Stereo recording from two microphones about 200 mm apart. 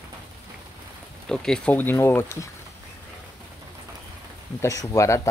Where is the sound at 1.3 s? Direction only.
5° left (ahead or behind).